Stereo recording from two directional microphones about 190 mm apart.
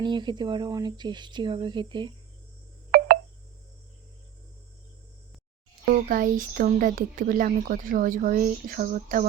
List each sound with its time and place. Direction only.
0.0 s speech: 25° right (ahead or behind)
5.9 s speech: 45° right (ahead or behind)